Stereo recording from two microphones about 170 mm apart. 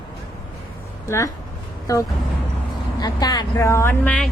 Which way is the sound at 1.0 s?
15° left (ahead or behind).